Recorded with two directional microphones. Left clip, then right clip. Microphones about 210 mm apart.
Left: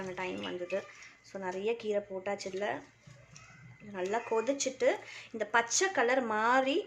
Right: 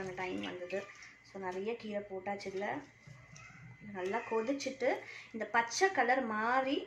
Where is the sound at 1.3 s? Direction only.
55° left (ahead or behind).